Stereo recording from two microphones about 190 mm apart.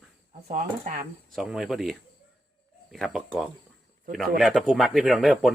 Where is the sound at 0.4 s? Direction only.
40° right (ahead or behind).